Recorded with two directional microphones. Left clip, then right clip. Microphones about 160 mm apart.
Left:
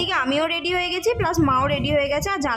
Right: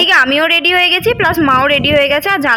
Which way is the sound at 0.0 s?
15° right (ahead or behind).